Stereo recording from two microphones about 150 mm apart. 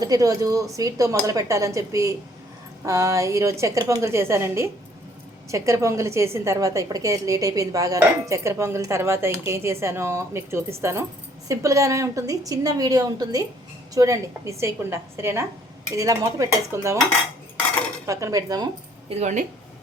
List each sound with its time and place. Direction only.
0.0 s a woman's voice: 25° right (ahead or behind)
18.0 s a woman's voice: 20° right (ahead or behind)
19.0 s speech: 50° right (ahead or behind)